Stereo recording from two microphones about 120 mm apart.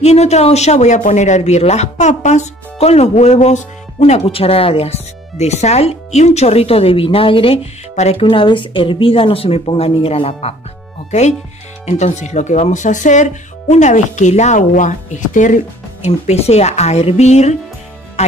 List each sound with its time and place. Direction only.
0.0 s speech: 65° left (ahead or behind)
7.9 s speech: 65° left (ahead or behind)
8.2 s speech: 45° left (ahead or behind)
11.1 s speech: 70° left (ahead or behind)